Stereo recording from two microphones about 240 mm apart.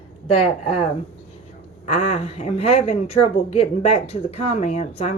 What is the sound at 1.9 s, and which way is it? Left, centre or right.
Speech, left.